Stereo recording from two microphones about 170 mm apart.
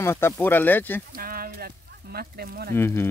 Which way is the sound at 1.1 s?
60° right (ahead or behind).